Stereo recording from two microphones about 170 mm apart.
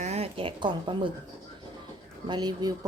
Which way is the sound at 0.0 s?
40° right (ahead or behind).